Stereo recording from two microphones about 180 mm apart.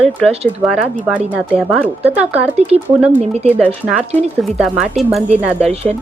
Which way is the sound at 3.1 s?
35° right (ahead or behind).